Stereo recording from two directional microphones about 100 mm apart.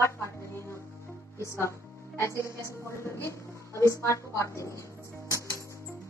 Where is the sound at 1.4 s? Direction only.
30° left (ahead or behind).